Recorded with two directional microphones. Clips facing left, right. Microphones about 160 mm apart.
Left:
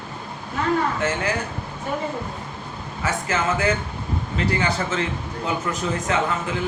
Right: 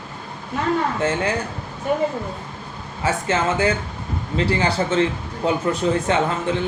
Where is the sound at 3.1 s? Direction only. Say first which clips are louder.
Right 3 dB; 30° right (ahead or behind).